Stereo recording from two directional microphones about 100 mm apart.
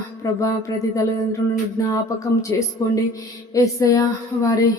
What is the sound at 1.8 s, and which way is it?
Speech, 35° left (ahead or behind).